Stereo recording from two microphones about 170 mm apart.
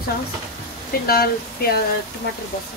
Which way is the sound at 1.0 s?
65° left (ahead or behind).